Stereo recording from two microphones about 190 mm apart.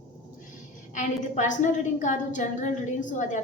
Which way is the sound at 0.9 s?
40° left (ahead or behind).